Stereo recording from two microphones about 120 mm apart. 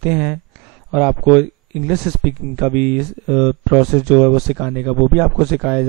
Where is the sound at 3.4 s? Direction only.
5° right (ahead or behind).